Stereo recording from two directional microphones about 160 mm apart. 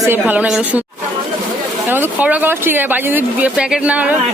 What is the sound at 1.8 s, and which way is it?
Speech, 15° right (ahead or behind).